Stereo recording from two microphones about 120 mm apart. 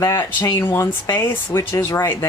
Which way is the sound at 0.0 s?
20° left (ahead or behind).